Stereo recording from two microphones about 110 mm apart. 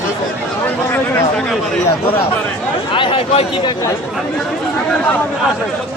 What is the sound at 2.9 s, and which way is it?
Speech, 50° left (ahead or behind).